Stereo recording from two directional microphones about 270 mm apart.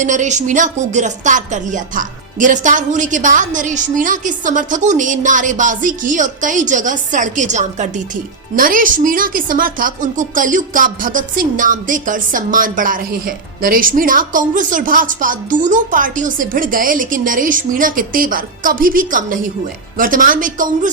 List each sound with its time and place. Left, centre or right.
0.0 s speech: right